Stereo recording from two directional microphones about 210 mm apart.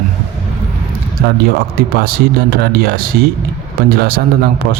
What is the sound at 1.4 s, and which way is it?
Speech, 45° right (ahead or behind).